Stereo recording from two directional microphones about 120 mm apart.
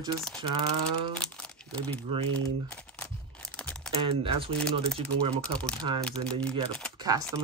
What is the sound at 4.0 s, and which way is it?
Speech, 50° right (ahead or behind).